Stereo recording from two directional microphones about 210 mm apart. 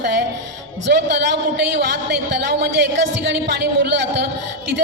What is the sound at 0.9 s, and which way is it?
A man's voice, 55° right (ahead or behind).